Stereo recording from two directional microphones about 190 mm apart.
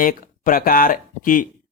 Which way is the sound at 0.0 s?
45° left (ahead or behind).